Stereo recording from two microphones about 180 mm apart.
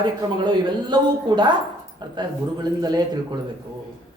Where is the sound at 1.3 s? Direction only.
25° right (ahead or behind).